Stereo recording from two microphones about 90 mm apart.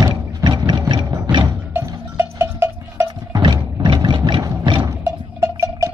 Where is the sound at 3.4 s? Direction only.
60° right (ahead or behind).